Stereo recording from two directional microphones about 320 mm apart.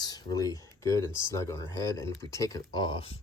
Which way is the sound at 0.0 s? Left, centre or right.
Centre.